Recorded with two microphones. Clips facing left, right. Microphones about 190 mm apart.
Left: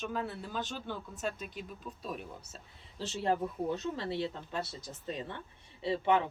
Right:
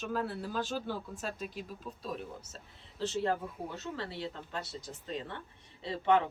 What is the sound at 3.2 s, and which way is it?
Speech, 20° left (ahead or behind).